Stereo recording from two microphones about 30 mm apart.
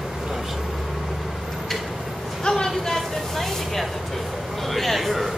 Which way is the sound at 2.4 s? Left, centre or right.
Left.